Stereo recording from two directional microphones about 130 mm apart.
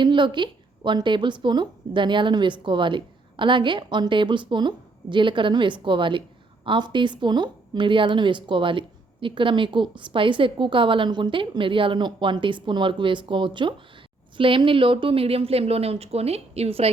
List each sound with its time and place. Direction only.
0.0 s speech: 35° right (ahead or behind)